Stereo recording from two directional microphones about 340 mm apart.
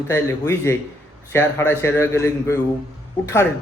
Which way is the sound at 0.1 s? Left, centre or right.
Centre.